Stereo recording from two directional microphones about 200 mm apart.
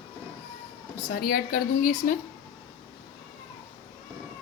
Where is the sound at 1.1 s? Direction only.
45° left (ahead or behind).